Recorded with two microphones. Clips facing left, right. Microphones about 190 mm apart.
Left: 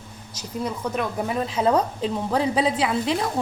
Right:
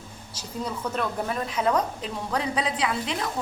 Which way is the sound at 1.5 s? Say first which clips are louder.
Left 4 dB; 30° left (ahead or behind).